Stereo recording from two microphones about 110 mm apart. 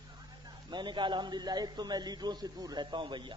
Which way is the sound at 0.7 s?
45° right (ahead or behind).